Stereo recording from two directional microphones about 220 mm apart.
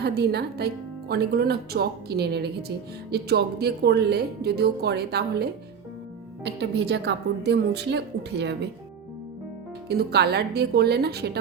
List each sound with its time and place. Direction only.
0.0 s speech: 45° right (ahead or behind)
9.9 s speech: 45° right (ahead or behind)